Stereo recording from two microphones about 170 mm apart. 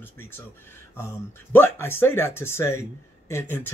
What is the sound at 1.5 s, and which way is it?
Speech, 15° left (ahead or behind).